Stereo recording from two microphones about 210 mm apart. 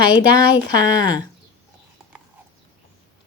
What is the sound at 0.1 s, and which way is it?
Speech, 20° left (ahead or behind).